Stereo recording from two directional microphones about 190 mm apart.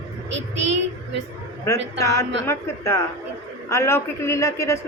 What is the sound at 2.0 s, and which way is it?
Speech, 15° left (ahead or behind).